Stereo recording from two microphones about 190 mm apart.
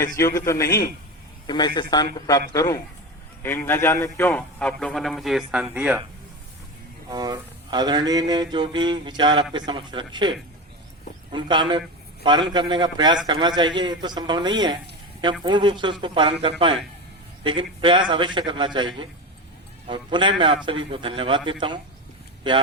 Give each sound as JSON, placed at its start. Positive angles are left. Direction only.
{"t": 0.0, "sound": "a man's voice", "side_deg": 15}
{"t": 7.1, "sound": "mantra", "side_deg": -20}